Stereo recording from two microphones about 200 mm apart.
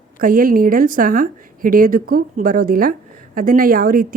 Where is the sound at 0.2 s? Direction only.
45° right (ahead or behind).